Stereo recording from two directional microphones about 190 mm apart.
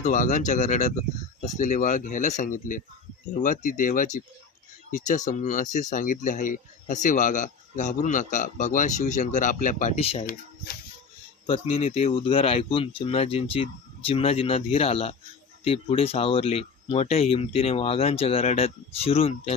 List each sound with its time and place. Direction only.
0.0 s speech: 40° left (ahead or behind)
11.4 s speech: 30° left (ahead or behind)